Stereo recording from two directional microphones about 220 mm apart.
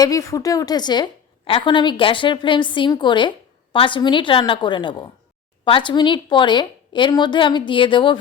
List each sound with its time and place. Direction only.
0.0 s a woman's voice: 15° left (ahead or behind)